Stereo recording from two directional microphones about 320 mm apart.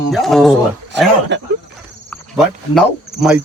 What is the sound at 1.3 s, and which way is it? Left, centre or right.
Speech, right.